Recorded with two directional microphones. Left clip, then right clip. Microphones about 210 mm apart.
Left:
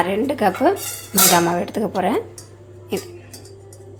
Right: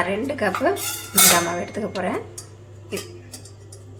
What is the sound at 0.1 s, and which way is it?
A woman's voice, 35° left (ahead or behind).